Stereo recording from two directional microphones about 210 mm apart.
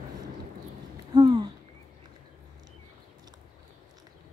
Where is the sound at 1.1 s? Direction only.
20° right (ahead or behind).